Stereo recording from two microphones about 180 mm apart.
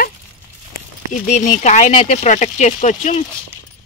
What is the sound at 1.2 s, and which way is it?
Speech, 45° left (ahead or behind).